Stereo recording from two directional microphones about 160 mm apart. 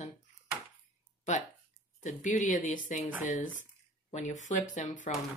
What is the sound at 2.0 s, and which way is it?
Speech, 50° left (ahead or behind).